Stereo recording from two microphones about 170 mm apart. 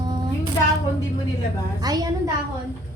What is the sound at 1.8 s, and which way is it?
Speech, 20° right (ahead or behind).